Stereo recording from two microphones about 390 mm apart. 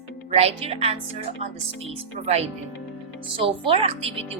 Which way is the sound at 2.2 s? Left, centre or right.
Centre.